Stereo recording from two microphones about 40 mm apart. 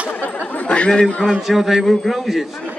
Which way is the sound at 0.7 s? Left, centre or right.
Left.